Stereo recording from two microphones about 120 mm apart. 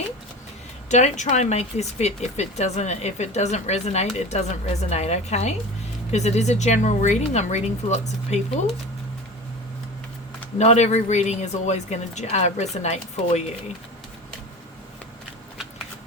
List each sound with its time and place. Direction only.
0.9 s a woman's voice: 75° left (ahead or behind)
10.6 s speech: 70° left (ahead or behind)